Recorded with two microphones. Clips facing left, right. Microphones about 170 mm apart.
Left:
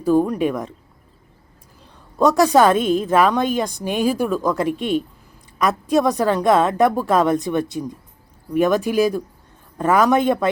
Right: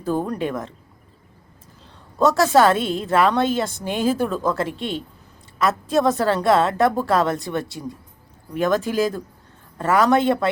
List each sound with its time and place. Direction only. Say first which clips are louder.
0.0 s a woman's voice: left 6 dB; 10° left (ahead or behind)
2.1 s a woman's voice: left 2 dB; 15° left (ahead or behind)